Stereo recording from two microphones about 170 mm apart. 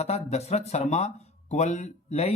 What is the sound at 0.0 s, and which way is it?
Speech, 40° left (ahead or behind).